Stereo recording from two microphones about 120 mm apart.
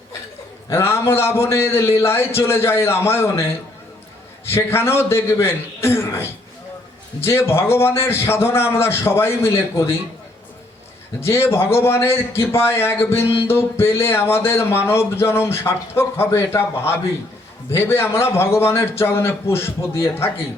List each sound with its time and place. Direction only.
0.7 s speech: 20° left (ahead or behind)
4.4 s speech: 20° left (ahead or behind)
11.2 s speech: 20° left (ahead or behind)